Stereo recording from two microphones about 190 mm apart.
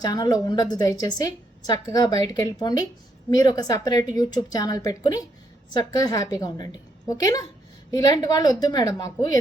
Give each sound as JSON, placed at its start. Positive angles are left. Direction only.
{"t": 0.0, "sound": "a woman's voice", "side_deg": 20}